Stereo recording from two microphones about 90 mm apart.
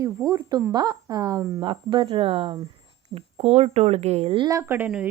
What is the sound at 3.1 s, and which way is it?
Speech, 45° right (ahead or behind).